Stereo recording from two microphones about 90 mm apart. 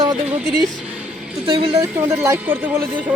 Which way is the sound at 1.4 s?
75° right (ahead or behind).